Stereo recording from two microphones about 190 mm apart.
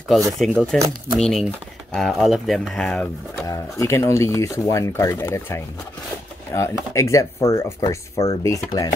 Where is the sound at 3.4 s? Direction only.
15° left (ahead or behind).